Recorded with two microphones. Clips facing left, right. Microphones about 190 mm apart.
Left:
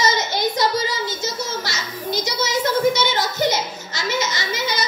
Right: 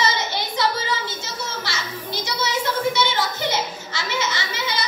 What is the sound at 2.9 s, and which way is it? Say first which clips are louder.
Children playing: left 2 dB; 40° left (ahead or behind).